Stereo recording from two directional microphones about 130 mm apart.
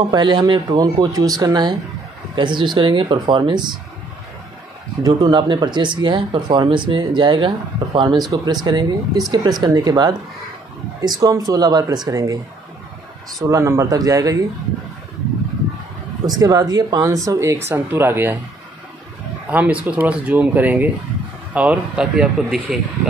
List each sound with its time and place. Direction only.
0.1 s speech: 35° right (ahead or behind)
5.0 s speech: 35° right (ahead or behind)
13.4 s speech: 20° right (ahead or behind)
16.3 s speech: 30° right (ahead or behind)
19.5 s speech: 10° right (ahead or behind)